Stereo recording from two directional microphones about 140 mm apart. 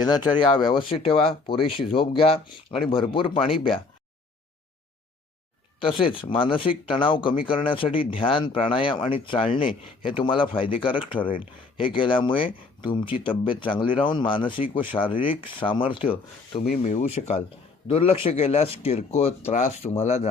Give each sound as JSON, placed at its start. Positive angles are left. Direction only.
{"t": 0.0, "sound": "speech", "side_deg": 30}
{"t": 5.8, "sound": "speech", "side_deg": 35}
{"t": 16.7, "sound": "speech", "side_deg": 55}